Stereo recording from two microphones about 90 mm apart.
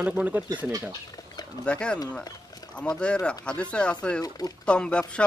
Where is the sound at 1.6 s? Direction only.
10° left (ahead or behind).